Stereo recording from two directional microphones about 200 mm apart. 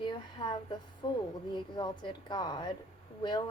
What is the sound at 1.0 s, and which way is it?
Speech, 20° left (ahead or behind).